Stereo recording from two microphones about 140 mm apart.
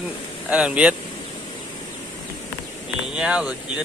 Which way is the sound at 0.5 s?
10° right (ahead or behind).